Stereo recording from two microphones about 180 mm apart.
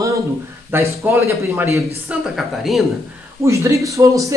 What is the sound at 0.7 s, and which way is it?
Speech, 15° right (ahead or behind).